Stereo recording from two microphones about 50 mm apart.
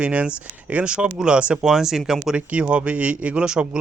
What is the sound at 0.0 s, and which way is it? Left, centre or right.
Speech, right.